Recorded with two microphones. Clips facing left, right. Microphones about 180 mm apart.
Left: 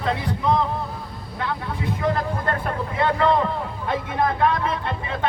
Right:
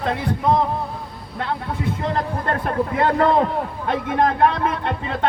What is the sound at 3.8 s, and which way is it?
Speech, 60° right (ahead or behind).